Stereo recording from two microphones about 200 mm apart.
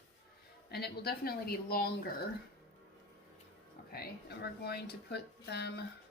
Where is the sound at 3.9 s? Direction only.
50° left (ahead or behind).